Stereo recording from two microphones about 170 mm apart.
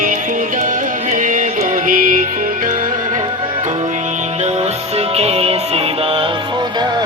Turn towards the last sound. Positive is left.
turn(degrees=-25)  # may be behind; listen again after turning